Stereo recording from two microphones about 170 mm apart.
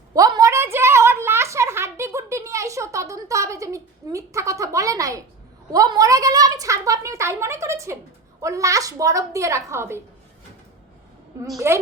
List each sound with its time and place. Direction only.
0.1 s a sound: 20° right (ahead or behind)
5.7 s a woman's voice: 20° right (ahead or behind)
11.5 s a woman's voice: 15° right (ahead or behind)